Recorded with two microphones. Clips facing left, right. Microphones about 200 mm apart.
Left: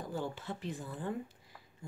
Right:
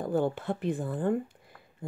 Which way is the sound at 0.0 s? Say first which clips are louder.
Right 11 dB; 55° right (ahead or behind).